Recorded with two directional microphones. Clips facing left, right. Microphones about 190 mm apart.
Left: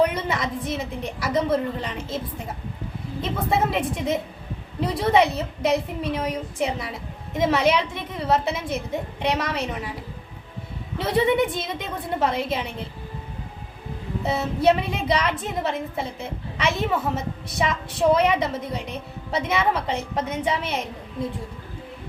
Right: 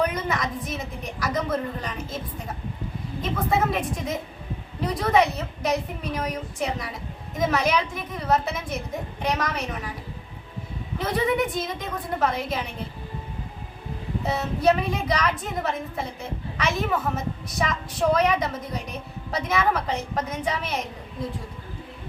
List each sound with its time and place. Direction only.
0.0 s a woman's voice: 30° left (ahead or behind)
10.9 s a woman's voice: 30° left (ahead or behind)
14.3 s a woman's voice: 25° left (ahead or behind)